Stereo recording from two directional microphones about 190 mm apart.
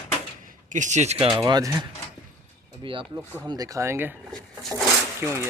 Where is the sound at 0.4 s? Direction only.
40° right (ahead or behind).